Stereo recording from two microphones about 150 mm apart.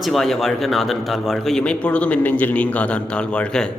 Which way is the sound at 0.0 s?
Centre (ahead or behind).